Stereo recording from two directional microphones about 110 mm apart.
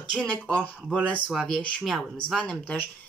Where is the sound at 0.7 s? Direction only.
10° right (ahead or behind).